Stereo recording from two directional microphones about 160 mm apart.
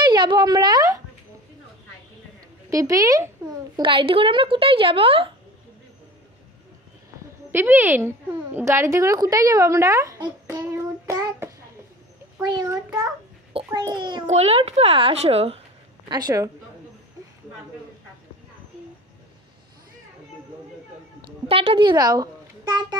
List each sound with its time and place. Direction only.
0.0 s a sound: 30° right (ahead or behind)
2.7 s a woman's voice: 20° right (ahead or behind)
3.7 s speech: 30° right (ahead or behind)
7.5 s a woman's voice: 15° right (ahead or behind); by 14.2 s 30° right (ahead or behind)
14.2 s speech: 45° right (ahead or behind)
16.1 s a woman's voice: 25° right (ahead or behind)
21.5 s a woman's voice: 35° right (ahead or behind)